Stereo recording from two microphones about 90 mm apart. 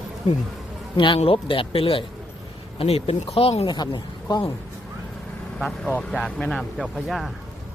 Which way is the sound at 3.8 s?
50° left (ahead or behind).